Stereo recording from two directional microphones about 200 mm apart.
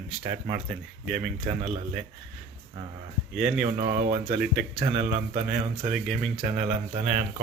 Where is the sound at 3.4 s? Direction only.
Centre (ahead or behind).